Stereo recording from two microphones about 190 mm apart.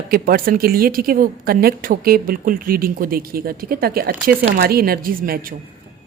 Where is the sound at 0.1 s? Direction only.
50° right (ahead or behind).